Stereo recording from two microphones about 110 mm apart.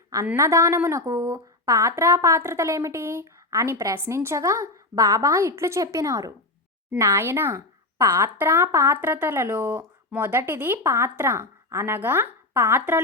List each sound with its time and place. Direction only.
0.3 s speech: 30° right (ahead or behind)